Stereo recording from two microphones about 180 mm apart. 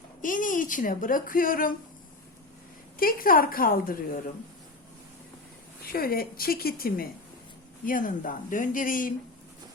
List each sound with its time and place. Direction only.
0.2 s speech: 50° left (ahead or behind)
3.0 s speech: 55° left (ahead or behind)
5.8 s a woman's voice: 55° left (ahead or behind)